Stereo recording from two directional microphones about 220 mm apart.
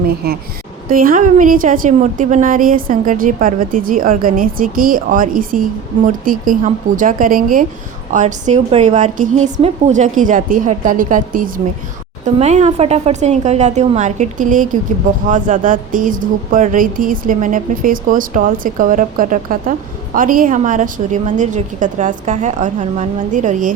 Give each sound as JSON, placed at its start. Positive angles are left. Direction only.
{"t": 0.9, "sound": "a woman's voice", "side_deg": -40}